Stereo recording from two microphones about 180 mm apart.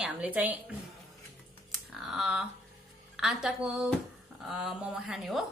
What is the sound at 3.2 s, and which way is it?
Speech, centre (ahead or behind).